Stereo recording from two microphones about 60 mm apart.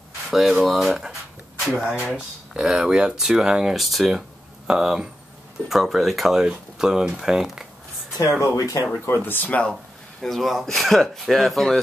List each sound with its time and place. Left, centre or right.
0.3 s speech: centre
8.2 s speech: left
9.0 s speech: left
10.2 s speech: centre